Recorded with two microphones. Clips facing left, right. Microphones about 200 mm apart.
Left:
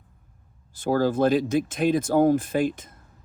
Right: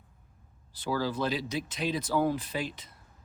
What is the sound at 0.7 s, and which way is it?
Speech, 50° left (ahead or behind).